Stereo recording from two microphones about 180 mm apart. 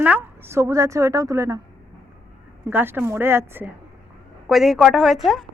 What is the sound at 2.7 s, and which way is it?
A woman's voice, 10° right (ahead or behind).